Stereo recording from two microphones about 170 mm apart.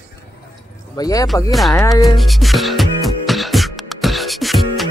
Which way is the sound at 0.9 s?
20° left (ahead or behind).